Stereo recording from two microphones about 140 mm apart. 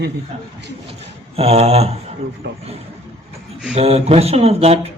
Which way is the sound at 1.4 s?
45° right (ahead or behind).